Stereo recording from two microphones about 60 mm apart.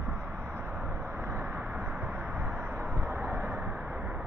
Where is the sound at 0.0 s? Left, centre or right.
Right.